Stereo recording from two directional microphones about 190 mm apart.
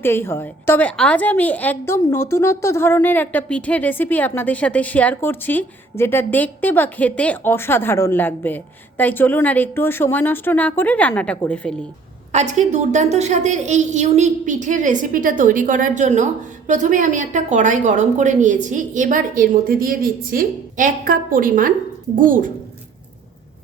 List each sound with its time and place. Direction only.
0.0 s speech: 10° left (ahead or behind)
12.3 s a woman's voice: 40° right (ahead or behind)